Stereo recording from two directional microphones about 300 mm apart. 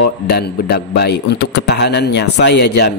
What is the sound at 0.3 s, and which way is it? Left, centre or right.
Speech, left.